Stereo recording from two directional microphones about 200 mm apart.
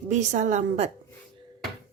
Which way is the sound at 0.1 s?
35° right (ahead or behind).